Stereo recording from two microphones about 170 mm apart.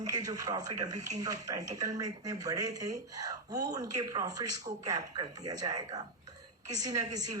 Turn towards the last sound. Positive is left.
turn(degrees=-20)  # may be behind; listen again after turning